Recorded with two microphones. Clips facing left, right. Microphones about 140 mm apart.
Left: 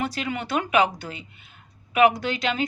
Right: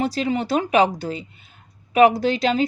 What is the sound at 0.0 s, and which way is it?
A woman's voice, 35° right (ahead or behind).